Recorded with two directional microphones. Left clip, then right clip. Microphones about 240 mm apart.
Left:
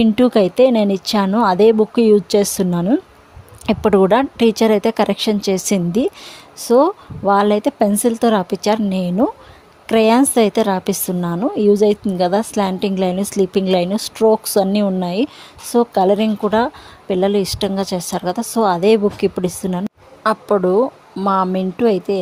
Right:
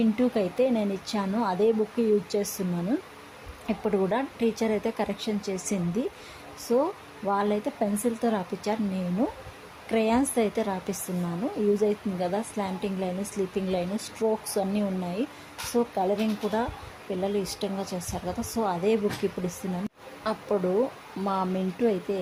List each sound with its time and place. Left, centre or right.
0.0 s a woman's voice: left